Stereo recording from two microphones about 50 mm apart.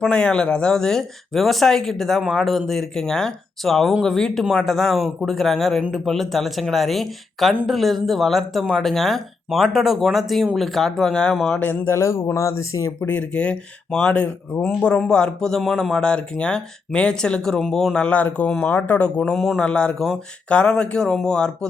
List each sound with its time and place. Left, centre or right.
0.1 s speech: centre
11.9 s speech: left
13.0 s speech: left
14.8 s speech: centre
16.0 s speech: centre
17.9 s speech: left
18.4 s speech: centre
18.7 s speech: left